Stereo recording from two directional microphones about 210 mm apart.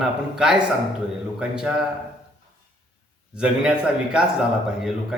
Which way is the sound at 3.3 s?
5° right (ahead or behind).